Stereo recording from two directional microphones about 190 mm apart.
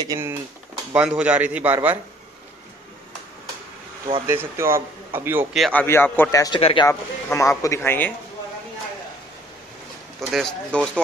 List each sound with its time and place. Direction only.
0.0 s a man's voice: 15° right (ahead or behind)
0.9 s a man's voice: 5° right (ahead or behind)
4.3 s a man's voice: 15° right (ahead or behind)
5.6 s speech: 10° left (ahead or behind)
6.6 s speech: 30° left (ahead or behind)
6.9 s speech: 15° left (ahead or behind)
10.3 s speech: centre (ahead or behind)